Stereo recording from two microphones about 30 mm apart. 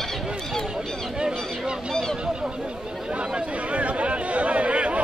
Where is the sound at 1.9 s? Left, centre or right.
Centre.